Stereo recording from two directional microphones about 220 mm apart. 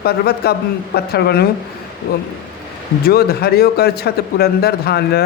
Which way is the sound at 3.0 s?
45° left (ahead or behind).